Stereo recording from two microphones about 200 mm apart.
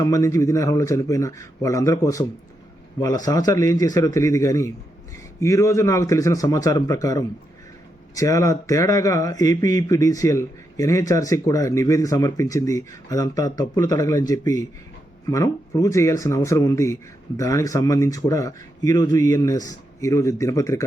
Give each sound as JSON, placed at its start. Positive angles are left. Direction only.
{"t": 0.0, "sound": "speech", "side_deg": 15}